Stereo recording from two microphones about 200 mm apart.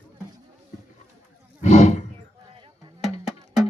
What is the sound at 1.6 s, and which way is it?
Roaring cats, 35° left (ahead or behind).